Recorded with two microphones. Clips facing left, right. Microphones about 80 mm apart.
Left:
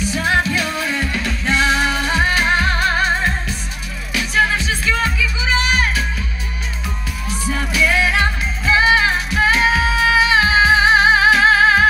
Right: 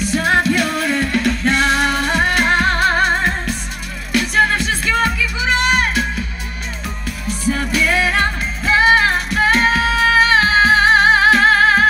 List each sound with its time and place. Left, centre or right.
0.2 s music: centre
0.6 s music: right
0.8 s music: centre
4.1 s music: right
7.2 s music: centre